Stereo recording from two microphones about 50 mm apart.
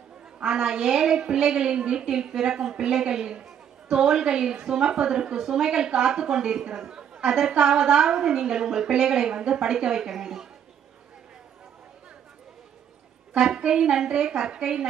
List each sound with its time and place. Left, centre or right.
0.4 s a woman's voice: centre
13.3 s a woman's voice: centre